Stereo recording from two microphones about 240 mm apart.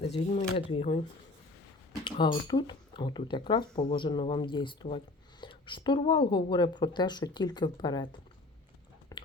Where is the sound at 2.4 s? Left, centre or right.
Centre.